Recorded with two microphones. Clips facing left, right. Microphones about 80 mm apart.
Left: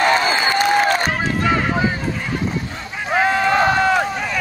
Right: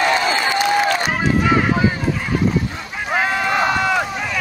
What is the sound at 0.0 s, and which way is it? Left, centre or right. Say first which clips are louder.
Crowd: left 1 dB; left.